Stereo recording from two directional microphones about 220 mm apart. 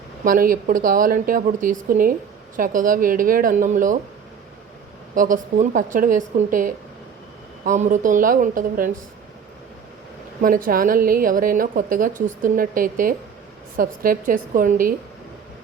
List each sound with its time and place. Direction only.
0.3 s a woman's voice: 40° right (ahead or behind)
5.1 s a woman's voice: 35° right (ahead or behind)
10.4 s a woman's voice: 40° right (ahead or behind)